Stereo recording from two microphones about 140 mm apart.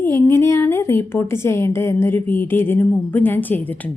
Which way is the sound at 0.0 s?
15° left (ahead or behind).